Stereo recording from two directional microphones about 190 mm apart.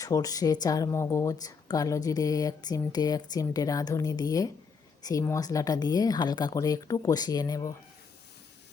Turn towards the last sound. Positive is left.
turn(degrees=20)  # may be behind; listen again after turning